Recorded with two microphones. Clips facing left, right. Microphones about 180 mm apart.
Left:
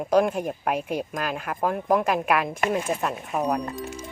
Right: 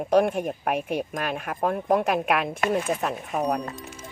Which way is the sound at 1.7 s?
35° right (ahead or behind).